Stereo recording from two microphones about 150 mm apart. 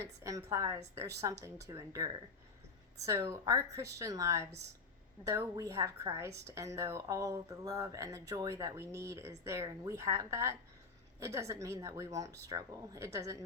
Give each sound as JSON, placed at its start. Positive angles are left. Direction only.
{"t": 0.0, "sound": "speech", "side_deg": -20}